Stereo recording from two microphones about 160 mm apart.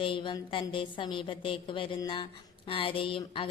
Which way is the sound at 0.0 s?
30° left (ahead or behind).